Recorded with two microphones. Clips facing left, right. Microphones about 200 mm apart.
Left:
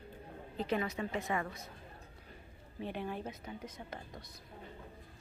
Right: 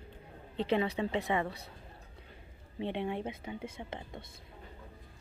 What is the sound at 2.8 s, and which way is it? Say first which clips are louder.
Speech: right 5 dB; 25° right (ahead or behind).